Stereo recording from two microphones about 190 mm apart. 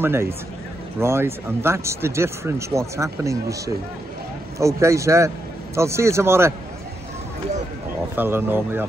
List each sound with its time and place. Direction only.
0.0 s speech: 10° right (ahead or behind)
8.2 s speech: 10° right (ahead or behind)